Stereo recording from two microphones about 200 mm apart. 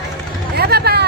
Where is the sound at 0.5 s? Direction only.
55° right (ahead or behind).